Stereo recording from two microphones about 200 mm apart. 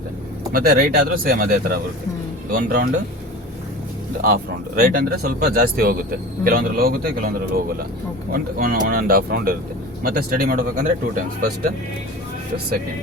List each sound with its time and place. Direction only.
0.5 s speech: 45° right (ahead or behind)
4.2 s speech: 45° right (ahead or behind)